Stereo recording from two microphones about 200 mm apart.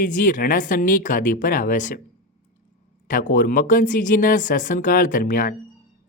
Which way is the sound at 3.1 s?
45° left (ahead or behind).